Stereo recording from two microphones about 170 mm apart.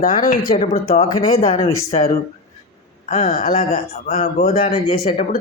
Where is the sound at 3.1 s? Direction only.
40° left (ahead or behind).